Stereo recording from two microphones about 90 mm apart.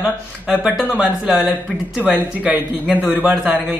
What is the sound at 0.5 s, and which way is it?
Speech, 10° right (ahead or behind).